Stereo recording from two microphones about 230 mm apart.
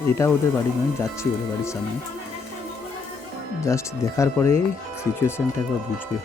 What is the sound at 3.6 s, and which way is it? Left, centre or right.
Speech, centre.